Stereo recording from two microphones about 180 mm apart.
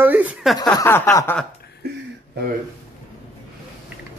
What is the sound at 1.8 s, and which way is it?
Speech, 65° right (ahead or behind).